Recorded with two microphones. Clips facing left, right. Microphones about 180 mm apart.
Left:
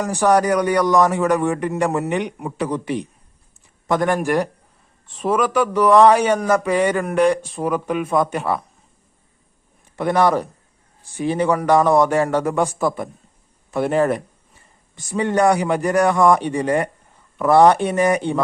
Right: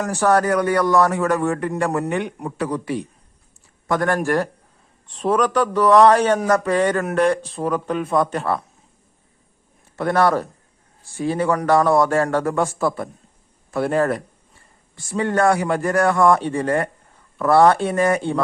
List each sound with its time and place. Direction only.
0.0 s a man's voice: 15° left (ahead or behind)
9.9 s a man's voice: 15° left (ahead or behind)